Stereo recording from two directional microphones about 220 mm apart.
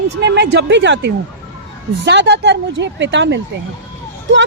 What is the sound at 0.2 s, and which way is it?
Speech, 50° right (ahead or behind).